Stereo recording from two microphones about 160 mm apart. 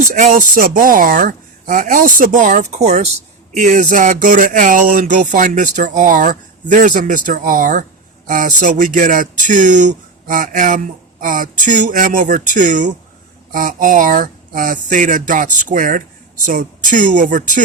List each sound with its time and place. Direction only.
0.1 s a woman's voice: 55° right (ahead or behind)